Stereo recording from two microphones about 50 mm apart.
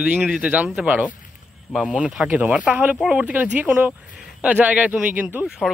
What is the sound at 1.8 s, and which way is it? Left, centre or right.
Speech, centre.